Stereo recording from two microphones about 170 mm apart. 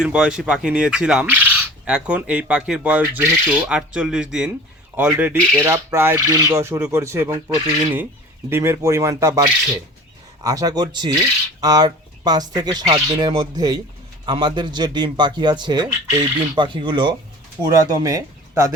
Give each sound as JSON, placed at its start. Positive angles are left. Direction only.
{"t": 0.0, "sound": "speech", "side_deg": -5}
{"t": 4.9, "sound": "owl", "side_deg": -10}
{"t": 10.4, "sound": "speech", "side_deg": -20}